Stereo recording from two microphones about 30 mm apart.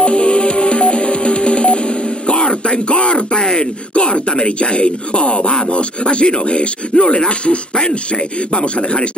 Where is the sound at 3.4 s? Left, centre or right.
Left.